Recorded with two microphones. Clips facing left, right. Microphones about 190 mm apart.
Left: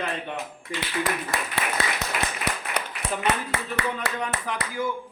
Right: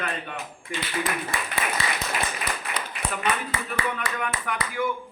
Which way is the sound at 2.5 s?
70° left (ahead or behind).